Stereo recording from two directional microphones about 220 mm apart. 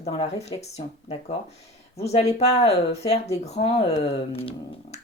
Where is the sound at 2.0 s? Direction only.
30° left (ahead or behind).